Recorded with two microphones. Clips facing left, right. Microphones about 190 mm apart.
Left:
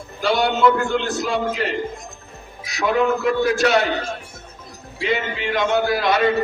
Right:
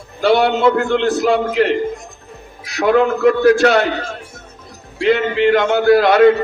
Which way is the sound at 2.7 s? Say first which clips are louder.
Right 5 dB; 65° right (ahead or behind).